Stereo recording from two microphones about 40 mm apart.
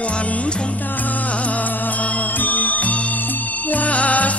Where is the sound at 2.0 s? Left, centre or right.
Left.